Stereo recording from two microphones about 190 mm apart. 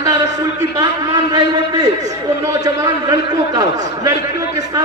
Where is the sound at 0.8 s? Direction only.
20° right (ahead or behind).